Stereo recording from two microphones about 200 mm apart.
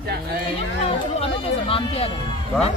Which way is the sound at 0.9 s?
30° left (ahead or behind).